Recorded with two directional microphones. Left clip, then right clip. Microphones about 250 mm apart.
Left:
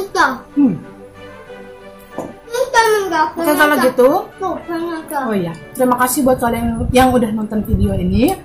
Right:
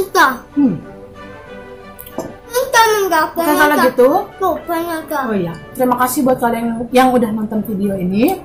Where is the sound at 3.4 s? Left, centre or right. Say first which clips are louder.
Even; centre.